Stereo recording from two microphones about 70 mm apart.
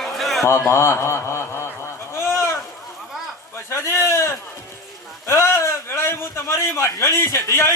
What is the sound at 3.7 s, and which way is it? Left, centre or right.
Sheep, left.